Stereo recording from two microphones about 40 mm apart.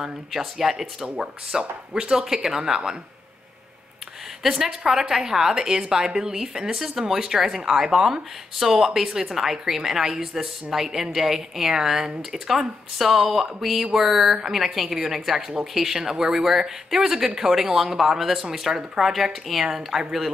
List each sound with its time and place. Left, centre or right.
0.4 s speech: centre
1.1 s a woman's voice: centre
4.4 s a woman's voice: centre